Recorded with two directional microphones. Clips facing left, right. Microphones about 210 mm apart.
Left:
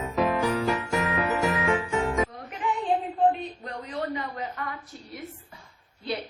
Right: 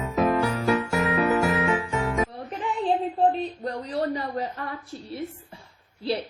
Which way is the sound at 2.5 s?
30° right (ahead or behind).